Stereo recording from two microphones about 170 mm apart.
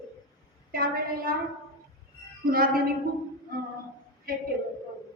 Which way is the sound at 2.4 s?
60° right (ahead or behind).